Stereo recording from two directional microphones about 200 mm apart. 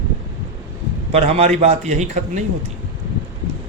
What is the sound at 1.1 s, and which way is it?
Speech, 30° right (ahead or behind).